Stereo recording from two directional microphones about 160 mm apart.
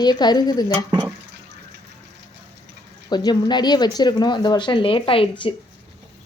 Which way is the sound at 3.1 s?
25° left (ahead or behind).